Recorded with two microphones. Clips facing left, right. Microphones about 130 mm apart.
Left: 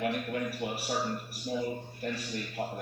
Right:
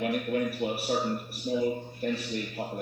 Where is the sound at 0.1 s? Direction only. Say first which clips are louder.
Right 5 dB; 15° right (ahead or behind).